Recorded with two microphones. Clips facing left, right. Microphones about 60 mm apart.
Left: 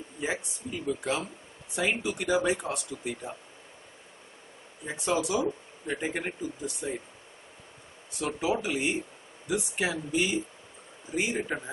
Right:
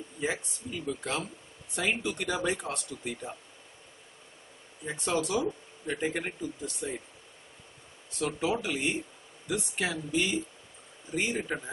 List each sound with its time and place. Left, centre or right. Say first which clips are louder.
0.2 s speech: even; centre
4.8 s speech: left 2 dB; centre
8.3 s speech: left 2 dB; centre
11.5 s speech: left 1 dB; centre